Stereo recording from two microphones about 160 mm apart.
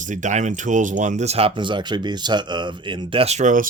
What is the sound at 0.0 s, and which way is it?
Speech, 50° right (ahead or behind).